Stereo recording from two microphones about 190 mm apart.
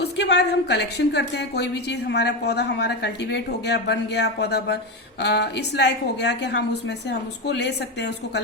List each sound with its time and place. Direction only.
0.0 s speech: 60° left (ahead or behind)